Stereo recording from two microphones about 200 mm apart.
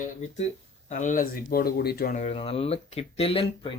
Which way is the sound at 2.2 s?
30° left (ahead or behind).